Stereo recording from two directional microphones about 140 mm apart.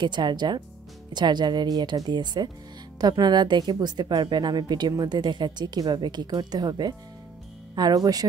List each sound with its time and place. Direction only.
0.0 s a woman's voice: 30° right (ahead or behind)